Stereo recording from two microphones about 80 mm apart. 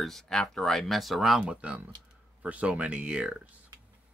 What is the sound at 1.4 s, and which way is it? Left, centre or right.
Speech, centre.